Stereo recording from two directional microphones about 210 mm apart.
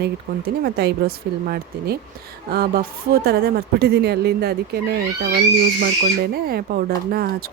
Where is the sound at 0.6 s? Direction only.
50° right (ahead or behind).